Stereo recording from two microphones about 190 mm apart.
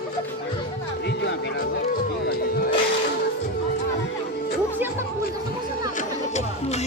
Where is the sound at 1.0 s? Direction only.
60° left (ahead or behind).